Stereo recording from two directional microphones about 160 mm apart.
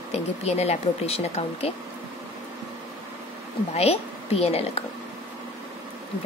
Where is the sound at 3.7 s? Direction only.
40° left (ahead or behind).